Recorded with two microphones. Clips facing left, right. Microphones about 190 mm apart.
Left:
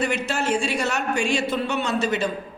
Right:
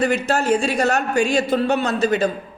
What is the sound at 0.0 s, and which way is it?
A man's voice, 40° right (ahead or behind).